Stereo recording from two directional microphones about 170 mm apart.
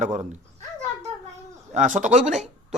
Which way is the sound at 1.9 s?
45° right (ahead or behind).